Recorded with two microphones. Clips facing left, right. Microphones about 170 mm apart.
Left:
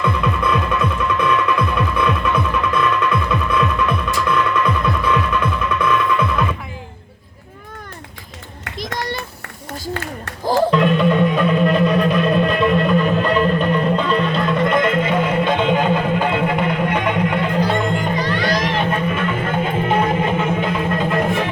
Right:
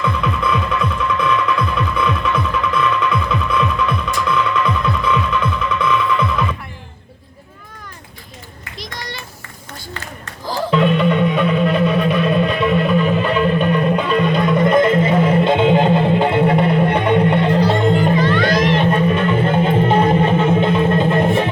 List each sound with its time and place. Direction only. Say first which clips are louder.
0.0 s music: even; 5° left (ahead or behind)
8.8 s a sound: left 6 dB; 50° left (ahead or behind)
10.7 s music: even; centre (ahead or behind); by 17.8 s 30° right (ahead or behind)
18.2 s music: right 5 dB; 40° left (ahead or behind)
18.4 s music: right 4 dB; 35° right (ahead or behind)